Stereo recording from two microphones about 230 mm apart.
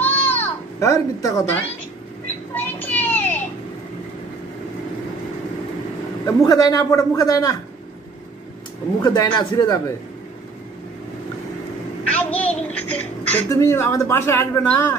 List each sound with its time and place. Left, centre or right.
0.0 s baby cry: centre
2.5 s a sound: centre
6.2 s a woman's voice: centre
9.0 s a woman's voice: centre
12.1 s a woman's voice: centre